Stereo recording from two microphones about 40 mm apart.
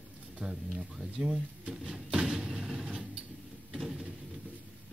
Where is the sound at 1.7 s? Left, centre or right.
Centre.